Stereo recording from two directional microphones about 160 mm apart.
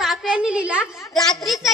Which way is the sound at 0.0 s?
5° right (ahead or behind).